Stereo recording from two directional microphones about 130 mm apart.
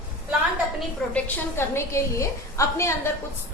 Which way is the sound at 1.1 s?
20° left (ahead or behind).